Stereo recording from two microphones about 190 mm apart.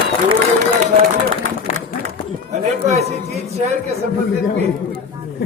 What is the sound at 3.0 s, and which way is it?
Speech, 35° right (ahead or behind).